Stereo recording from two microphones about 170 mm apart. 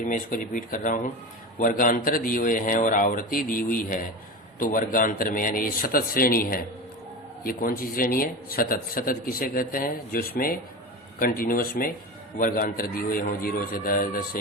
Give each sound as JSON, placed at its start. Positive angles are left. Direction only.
{"t": 0.1, "sound": "a man's voice", "side_deg": 50}